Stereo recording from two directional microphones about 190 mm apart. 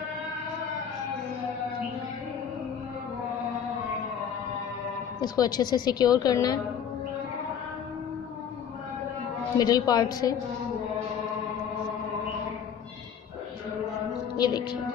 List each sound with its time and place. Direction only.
5.2 s a woman's voice: 20° left (ahead or behind)
9.6 s a woman's voice: 20° left (ahead or behind)
14.4 s a woman's voice: 25° left (ahead or behind)